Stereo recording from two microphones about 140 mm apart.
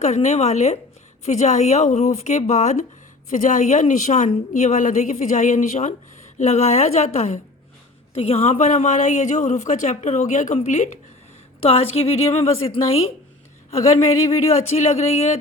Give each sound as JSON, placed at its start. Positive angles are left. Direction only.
{"t": 0.0, "sound": "a woman's voice", "side_deg": 55}
{"t": 11.6, "sound": "a woman's voice", "side_deg": 45}
{"t": 14.3, "sound": "a woman's voice", "side_deg": 50}